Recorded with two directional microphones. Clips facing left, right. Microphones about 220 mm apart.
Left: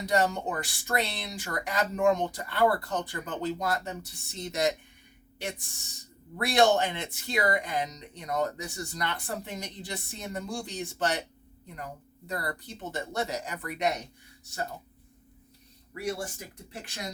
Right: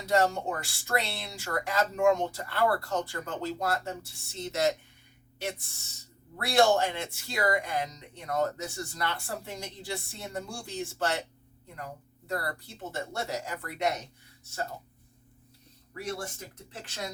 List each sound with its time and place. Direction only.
0.0 s speech: 15° left (ahead or behind)
12.3 s speech: 20° left (ahead or behind)
16.7 s speech: 15° left (ahead or behind)